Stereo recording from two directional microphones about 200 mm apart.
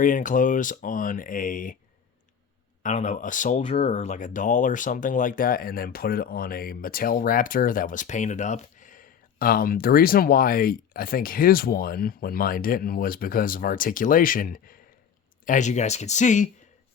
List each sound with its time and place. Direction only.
0.0 s speech: 40° left (ahead or behind)
2.8 s speech: 35° left (ahead or behind)